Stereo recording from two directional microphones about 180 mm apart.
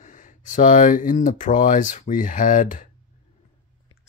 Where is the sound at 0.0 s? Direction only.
45° left (ahead or behind).